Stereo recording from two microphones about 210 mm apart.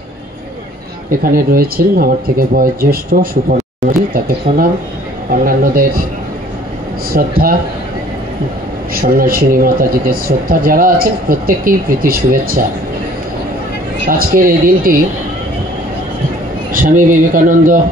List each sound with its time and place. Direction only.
1.2 s speech: 45° right (ahead or behind)
4.5 s speech: 35° right (ahead or behind)
7.1 s speech: 45° right (ahead or behind)
8.9 s speech: 45° right (ahead or behind)
14.0 s speech: 45° right (ahead or behind)
16.7 s speech: 40° right (ahead or behind)